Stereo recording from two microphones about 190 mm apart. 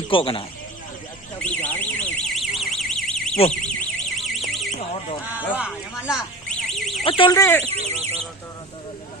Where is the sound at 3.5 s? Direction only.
5° left (ahead or behind).